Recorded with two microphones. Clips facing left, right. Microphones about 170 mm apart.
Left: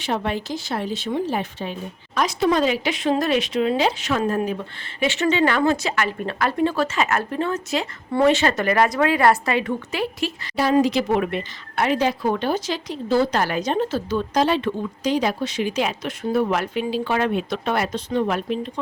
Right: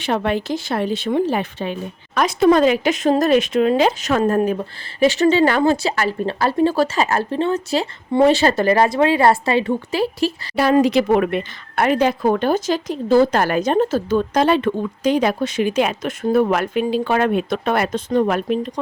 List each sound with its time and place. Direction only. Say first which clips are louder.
0.0 s speech: right 4 dB; 65° right (ahead or behind)
2.1 s speech: right 6 dB; 55° right (ahead or behind); by 10.5 s 35° right (ahead or behind)
10.5 s speech: right 3 dB; 65° right (ahead or behind)